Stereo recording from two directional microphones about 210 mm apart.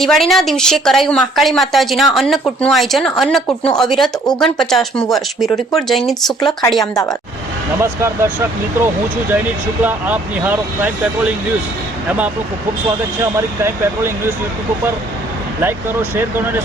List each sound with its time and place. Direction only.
0.0 s speech: centre (ahead or behind)
6.7 s a woman's voice: 15° left (ahead or behind)
7.8 s speech: 10° right (ahead or behind)
12.0 s speech: 5° right (ahead or behind)
15.6 s speech: 10° right (ahead or behind)